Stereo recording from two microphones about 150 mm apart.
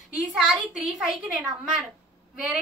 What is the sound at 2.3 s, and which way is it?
Speech, 5° right (ahead or behind).